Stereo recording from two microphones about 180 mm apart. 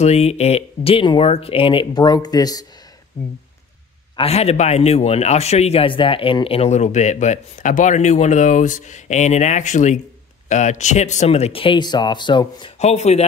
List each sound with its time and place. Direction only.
0.0 s a man's voice: 35° left (ahead or behind)
4.2 s a man's voice: 35° left (ahead or behind)